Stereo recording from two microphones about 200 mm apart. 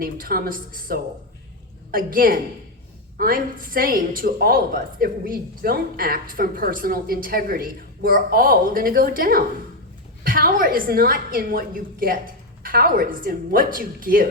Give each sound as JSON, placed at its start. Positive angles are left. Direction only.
{"t": 0.0, "sound": "a woman's voice", "side_deg": -45}